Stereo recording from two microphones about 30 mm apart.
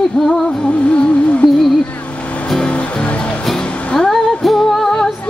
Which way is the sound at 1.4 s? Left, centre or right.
Centre.